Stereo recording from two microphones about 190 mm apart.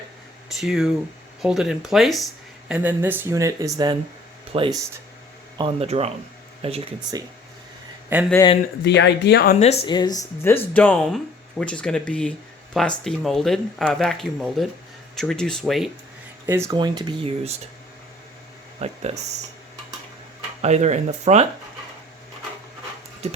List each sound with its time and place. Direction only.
0.6 s speech: centre (ahead or behind); by 7.1 s 30° right (ahead or behind)
8.1 s speech: 10° right (ahead or behind)
8.8 s speech: 65° left (ahead or behind)
9.6 s speech: 35° left (ahead or behind)
9.9 s speech: 20° left (ahead or behind); by 15.9 s centre (ahead or behind)
16.5 s speech: 15° right (ahead or behind)
18.8 s speech: 35° right (ahead or behind)
20.6 s speech: 35° right (ahead or behind)
23.2 s music: 35° right (ahead or behind)